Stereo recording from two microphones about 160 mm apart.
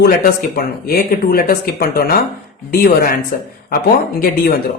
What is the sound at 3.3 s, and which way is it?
Speech, 55° left (ahead or behind).